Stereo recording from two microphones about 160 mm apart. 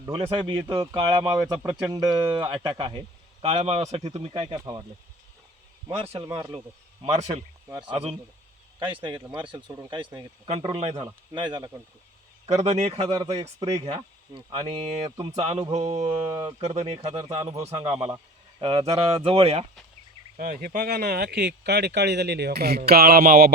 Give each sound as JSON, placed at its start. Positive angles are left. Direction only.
{"t": 0.1, "sound": "speech", "side_deg": -35}
{"t": 4.5, "sound": "speech", "side_deg": -25}
{"t": 6.2, "sound": "speech", "side_deg": -20}
{"t": 7.0, "sound": "a man's voice", "side_deg": -40}
{"t": 7.7, "sound": "speech", "side_deg": -25}
{"t": 10.9, "sound": "speech", "side_deg": -30}
{"t": 12.5, "sound": "a man's voice", "side_deg": -45}
{"t": 13.1, "sound": "speech", "side_deg": -25}
{"t": 13.7, "sound": "a man's voice", "side_deg": -40}
{"t": 16.2, "sound": "speech", "side_deg": -20}
{"t": 16.5, "sound": "speech", "side_deg": -40}
{"t": 17.2, "sound": "speech", "side_deg": -20}
{"t": 17.7, "sound": "speech", "side_deg": -40}
{"t": 20.3, "sound": "speech", "side_deg": -55}